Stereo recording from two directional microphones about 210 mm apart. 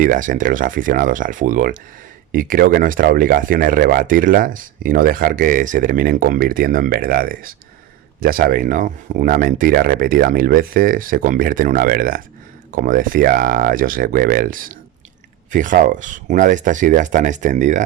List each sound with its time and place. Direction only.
0.0 s speech: 40° right (ahead or behind)